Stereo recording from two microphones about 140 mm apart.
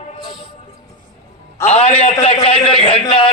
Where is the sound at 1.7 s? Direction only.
50° left (ahead or behind).